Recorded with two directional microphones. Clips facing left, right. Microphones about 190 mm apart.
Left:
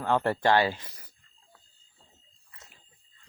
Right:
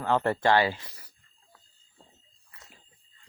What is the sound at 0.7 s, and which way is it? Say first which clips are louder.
Speech: even; 20° left (ahead or behind).